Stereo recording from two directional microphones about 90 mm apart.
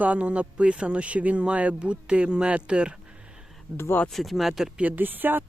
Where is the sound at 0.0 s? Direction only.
15° right (ahead or behind).